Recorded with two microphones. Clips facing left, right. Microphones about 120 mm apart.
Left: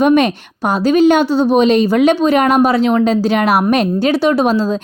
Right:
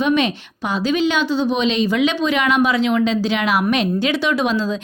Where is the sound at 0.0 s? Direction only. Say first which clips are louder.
Left 6 dB; 50° left (ahead or behind).